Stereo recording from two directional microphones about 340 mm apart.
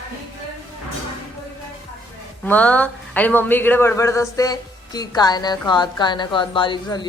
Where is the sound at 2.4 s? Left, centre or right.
Centre.